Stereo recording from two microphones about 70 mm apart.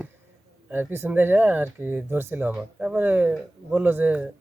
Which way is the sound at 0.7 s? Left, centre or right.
Right.